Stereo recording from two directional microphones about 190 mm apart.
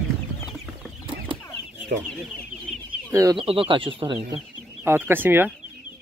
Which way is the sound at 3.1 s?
15° right (ahead or behind).